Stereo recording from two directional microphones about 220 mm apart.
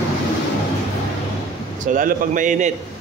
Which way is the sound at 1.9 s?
35° right (ahead or behind).